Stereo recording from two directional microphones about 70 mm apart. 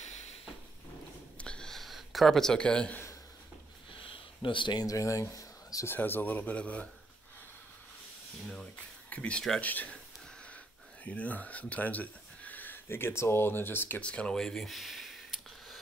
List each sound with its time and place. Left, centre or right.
1.4 s a sound: centre
1.8 s speech: centre
4.6 s speech: left
5.9 s speech: left
8.7 s speech: left
11.1 s speech: left
12.8 s speech: left
14.0 s a sound: centre